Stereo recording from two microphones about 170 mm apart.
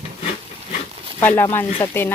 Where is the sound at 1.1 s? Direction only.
15° left (ahead or behind).